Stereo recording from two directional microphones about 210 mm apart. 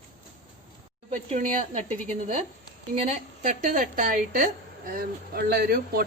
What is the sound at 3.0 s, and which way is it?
A woman's voice, 35° right (ahead or behind).